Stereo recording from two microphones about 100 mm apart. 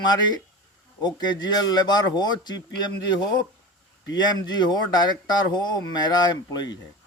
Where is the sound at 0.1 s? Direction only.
45° left (ahead or behind).